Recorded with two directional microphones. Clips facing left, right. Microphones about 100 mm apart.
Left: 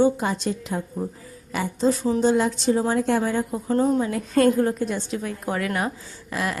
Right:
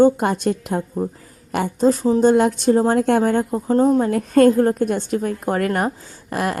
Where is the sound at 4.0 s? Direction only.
50° right (ahead or behind).